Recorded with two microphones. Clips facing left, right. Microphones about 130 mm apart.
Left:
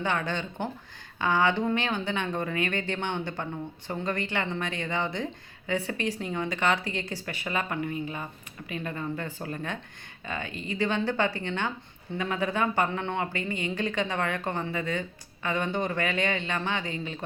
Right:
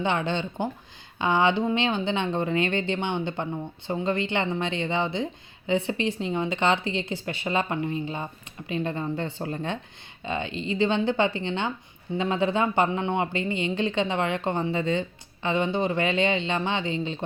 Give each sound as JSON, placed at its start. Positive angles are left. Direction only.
{"t": 0.0, "sound": "speech", "side_deg": -20}